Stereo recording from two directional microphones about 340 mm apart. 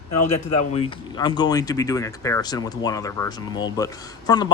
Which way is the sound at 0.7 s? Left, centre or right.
Centre.